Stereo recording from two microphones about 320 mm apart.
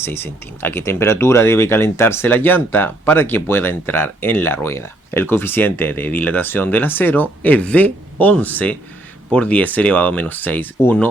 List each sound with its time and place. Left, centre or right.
0.6 s speech: centre